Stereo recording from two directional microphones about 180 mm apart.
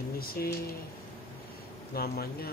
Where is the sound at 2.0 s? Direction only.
60° left (ahead or behind).